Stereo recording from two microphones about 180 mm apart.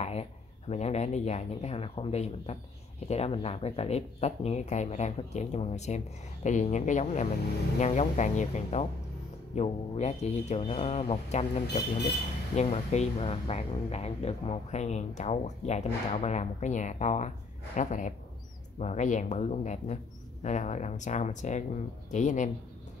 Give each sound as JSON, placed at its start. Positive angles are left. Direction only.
{"t": 0.0, "sound": "speech", "side_deg": 35}